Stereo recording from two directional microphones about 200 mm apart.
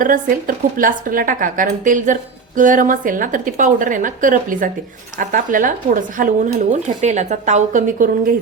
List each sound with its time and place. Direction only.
0.0 s speech: 45° right (ahead or behind)